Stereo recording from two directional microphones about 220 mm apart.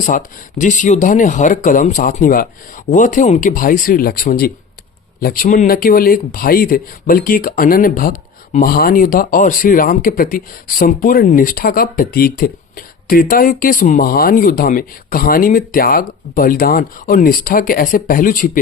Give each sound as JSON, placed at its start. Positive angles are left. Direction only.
{"t": 0.0, "sound": "speech", "side_deg": 35}